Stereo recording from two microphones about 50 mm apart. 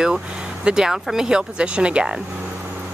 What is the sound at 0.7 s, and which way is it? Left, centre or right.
Speech, centre.